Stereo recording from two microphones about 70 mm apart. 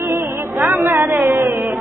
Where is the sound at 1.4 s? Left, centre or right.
Right.